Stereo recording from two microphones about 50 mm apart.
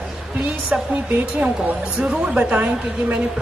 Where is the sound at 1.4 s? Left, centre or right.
Right.